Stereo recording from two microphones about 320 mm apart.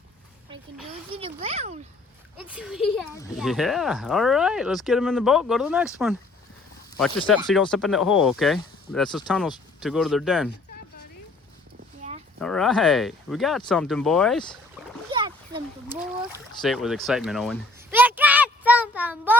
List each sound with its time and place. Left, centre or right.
1.1 s speech: centre
2.4 s speech: centre
7.2 s speech: centre
12.4 s speech: centre
14.8 s rowboat: centre
15.1 s splash: centre
16.6 s a sound: centre